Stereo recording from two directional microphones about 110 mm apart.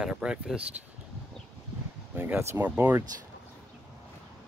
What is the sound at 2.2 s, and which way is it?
Speech, 20° right (ahead or behind).